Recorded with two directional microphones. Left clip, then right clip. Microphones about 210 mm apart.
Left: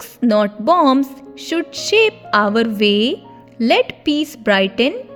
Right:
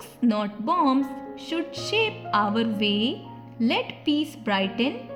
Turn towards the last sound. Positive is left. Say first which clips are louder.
# left 10 dB
turn(degrees=30)  # may be behind; listen again after turning